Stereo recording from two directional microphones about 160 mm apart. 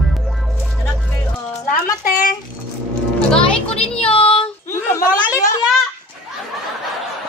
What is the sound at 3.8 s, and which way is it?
Speech, 5° left (ahead or behind).